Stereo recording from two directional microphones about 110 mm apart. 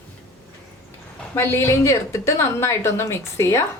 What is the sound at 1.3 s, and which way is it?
A woman's voice, 20° left (ahead or behind).